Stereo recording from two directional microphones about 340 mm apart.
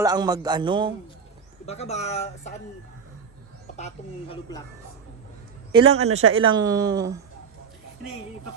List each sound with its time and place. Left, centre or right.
0.0 s a man's voice: centre
1.6 s speech: centre
3.8 s a woman's voice: centre
5.7 s a man's voice: centre
6.2 s speech: right
6.5 s a man's voice: centre